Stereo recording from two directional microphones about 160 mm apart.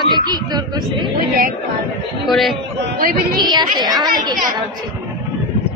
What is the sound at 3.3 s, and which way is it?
Speech, 30° right (ahead or behind).